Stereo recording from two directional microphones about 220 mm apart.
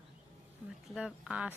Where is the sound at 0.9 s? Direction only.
5° right (ahead or behind).